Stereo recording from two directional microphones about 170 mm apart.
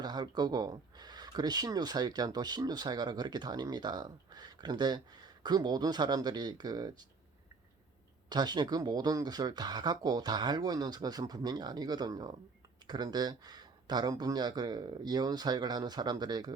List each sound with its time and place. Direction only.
0.0 s speech: 25° right (ahead or behind)
8.3 s speech: 25° right (ahead or behind)